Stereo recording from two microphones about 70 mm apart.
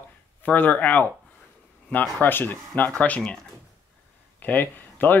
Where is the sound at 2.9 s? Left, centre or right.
Centre.